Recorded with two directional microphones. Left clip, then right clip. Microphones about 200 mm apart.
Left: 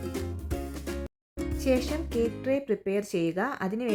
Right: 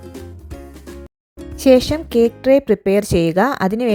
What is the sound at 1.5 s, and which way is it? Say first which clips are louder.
Speech: right 15 dB; 35° right (ahead or behind).